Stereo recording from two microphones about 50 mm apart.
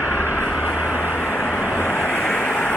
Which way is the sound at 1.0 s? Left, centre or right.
Left.